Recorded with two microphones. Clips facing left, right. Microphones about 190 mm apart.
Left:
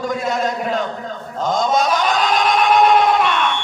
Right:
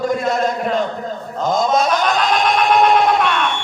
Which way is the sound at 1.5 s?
Centre (ahead or behind).